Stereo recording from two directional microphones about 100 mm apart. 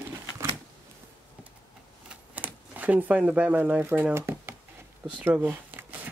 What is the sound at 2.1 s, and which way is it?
Camera, 15° right (ahead or behind).